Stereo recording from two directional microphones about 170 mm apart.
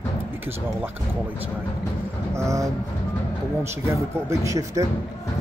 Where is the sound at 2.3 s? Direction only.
20° right (ahead or behind).